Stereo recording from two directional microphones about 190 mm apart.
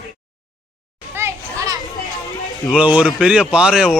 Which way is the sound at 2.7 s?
5° right (ahead or behind).